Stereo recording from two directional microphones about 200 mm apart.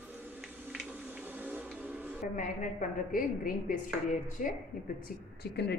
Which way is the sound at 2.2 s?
40° left (ahead or behind).